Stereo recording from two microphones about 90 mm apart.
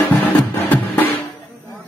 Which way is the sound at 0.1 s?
20° left (ahead or behind).